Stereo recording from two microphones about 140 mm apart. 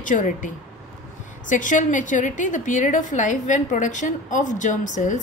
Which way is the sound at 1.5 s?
65° left (ahead or behind).